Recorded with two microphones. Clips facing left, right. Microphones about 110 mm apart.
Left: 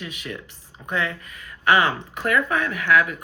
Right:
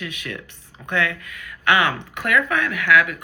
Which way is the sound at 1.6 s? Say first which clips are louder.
Even; 35° left (ahead or behind).